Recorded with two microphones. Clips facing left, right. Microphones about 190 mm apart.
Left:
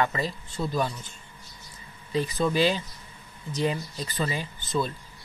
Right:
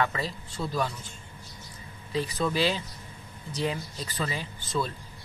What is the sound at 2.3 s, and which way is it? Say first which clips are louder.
Speech: left 3 dB; 10° left (ahead or behind).